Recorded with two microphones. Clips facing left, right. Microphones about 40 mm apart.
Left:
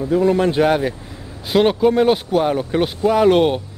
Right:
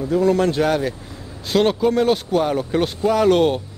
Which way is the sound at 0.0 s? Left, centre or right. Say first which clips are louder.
Left 1 dB; centre.